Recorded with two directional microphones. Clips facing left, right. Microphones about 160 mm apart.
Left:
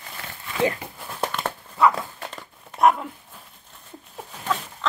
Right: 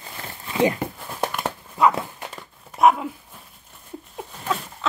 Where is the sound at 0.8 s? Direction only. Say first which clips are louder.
Right 10 dB; 55° right (ahead or behind).